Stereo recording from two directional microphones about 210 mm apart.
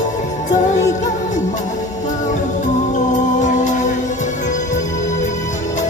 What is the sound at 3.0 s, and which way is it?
Music, 35° left (ahead or behind).